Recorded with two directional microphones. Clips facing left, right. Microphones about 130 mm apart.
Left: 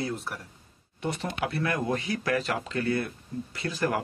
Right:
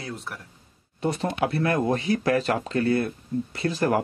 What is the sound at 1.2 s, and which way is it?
Speech, 30° right (ahead or behind).